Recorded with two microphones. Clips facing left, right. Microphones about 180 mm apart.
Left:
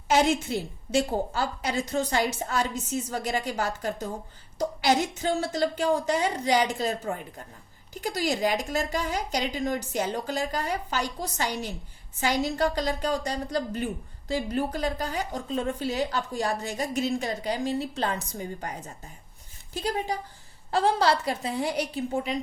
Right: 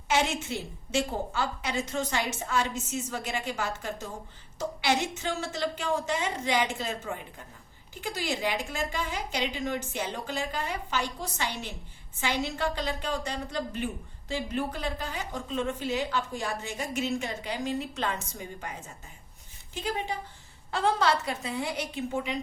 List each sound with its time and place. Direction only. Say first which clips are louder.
0.1 s a woman's voice: left 5 dB; 40° left (ahead or behind)